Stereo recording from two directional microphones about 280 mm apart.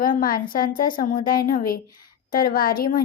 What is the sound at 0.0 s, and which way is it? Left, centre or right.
A child's voice, left.